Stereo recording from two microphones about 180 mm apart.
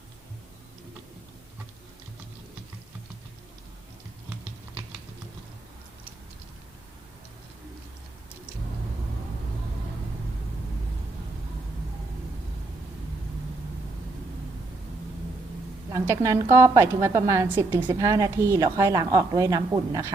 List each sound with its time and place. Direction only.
15.9 s a woman's voice: 15° right (ahead or behind)